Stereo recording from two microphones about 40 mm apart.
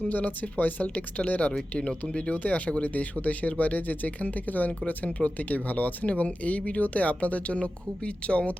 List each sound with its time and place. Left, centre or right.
0.1 s speech: left